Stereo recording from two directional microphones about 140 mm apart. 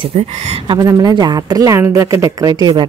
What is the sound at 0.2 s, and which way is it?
Speech, 55° right (ahead or behind).